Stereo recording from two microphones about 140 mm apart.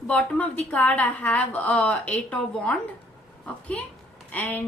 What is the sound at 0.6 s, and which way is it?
A woman's voice, 10° left (ahead or behind).